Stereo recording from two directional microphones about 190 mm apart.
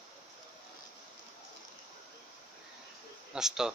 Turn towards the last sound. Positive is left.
turn(degrees=-5)  # may be behind; listen again after turning